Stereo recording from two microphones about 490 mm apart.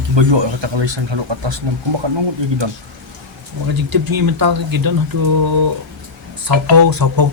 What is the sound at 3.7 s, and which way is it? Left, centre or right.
Speech, right.